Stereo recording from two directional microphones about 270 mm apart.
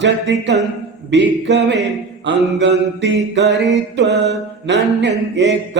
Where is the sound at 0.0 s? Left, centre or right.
Right.